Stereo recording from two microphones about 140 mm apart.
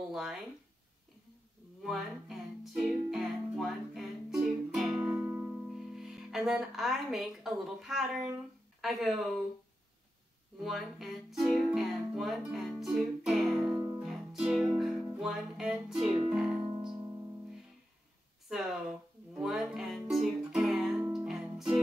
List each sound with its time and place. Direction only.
0.1 s speech: 5° right (ahead or behind)
1.8 s music: centre (ahead or behind)
10.6 s music: centre (ahead or behind)
16.9 s music: 25° right (ahead or behind)
18.5 s music: 5° right (ahead or behind)